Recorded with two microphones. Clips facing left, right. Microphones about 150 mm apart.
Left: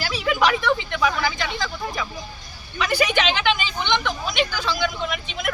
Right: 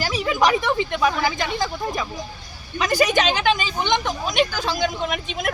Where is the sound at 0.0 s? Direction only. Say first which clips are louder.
Right 4 dB; 45° right (ahead or behind).